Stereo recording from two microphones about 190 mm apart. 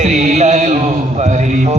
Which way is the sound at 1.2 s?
40° right (ahead or behind).